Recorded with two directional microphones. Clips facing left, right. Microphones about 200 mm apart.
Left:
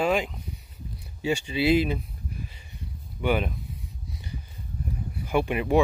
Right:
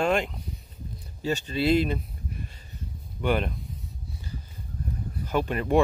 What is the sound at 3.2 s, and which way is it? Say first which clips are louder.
Speech: even; 5° left (ahead or behind).